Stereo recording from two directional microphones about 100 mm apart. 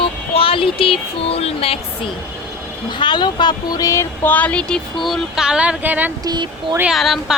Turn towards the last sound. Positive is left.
turn(degrees=0)  # may be behind; listen again after turning